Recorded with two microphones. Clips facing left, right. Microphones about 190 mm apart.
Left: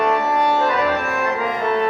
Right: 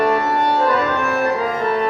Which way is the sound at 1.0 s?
40° right (ahead or behind).